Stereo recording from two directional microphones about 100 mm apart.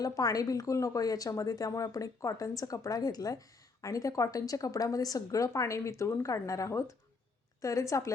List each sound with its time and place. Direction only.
0.0 s speech: 35° left (ahead or behind)